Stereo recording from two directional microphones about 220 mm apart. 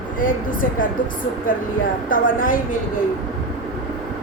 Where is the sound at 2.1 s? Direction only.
40° left (ahead or behind).